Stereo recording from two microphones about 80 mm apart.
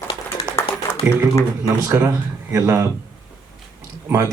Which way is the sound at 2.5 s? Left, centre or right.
Right.